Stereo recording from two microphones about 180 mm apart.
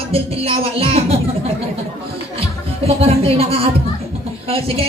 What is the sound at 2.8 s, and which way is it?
A woman's voice, 35° right (ahead or behind).